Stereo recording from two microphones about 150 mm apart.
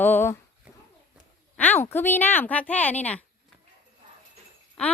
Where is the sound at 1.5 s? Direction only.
10° left (ahead or behind).